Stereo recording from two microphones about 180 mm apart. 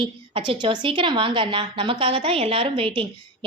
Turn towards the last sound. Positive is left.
turn(degrees=-30)  # may be behind; listen again after turning